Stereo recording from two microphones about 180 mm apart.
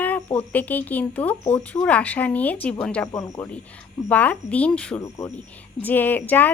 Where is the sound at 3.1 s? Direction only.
20° left (ahead or behind).